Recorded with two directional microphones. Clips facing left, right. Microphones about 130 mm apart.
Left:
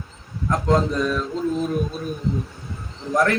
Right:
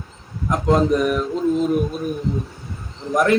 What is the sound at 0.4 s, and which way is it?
A man's voice, 20° right (ahead or behind).